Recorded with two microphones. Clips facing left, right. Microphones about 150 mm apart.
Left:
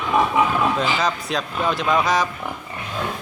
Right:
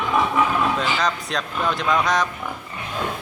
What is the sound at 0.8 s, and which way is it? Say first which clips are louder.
A man's voice: left 1 dB; centre (ahead or behind).